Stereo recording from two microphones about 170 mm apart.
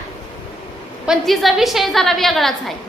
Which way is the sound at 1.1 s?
Centre (ahead or behind).